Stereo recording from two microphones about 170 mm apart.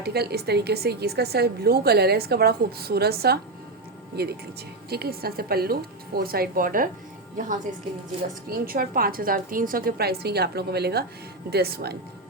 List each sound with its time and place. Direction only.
0.0 s a woman's voice: 70° right (ahead or behind); by 6.9 s 55° right (ahead or behind)
8.4 s a woman's voice: 60° right (ahead or behind)